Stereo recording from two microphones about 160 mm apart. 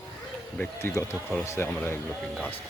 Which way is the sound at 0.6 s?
15° left (ahead or behind).